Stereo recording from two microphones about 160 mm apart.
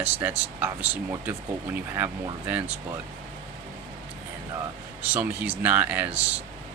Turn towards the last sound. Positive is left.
turn(degrees=-10)  # may be behind; listen again after turning